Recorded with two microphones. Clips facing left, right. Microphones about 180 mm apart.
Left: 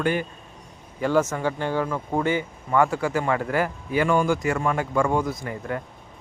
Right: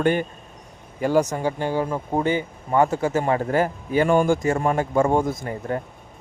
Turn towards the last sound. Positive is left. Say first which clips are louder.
# right 3 dB
turn(degrees=-35)  # may be behind; listen again after turning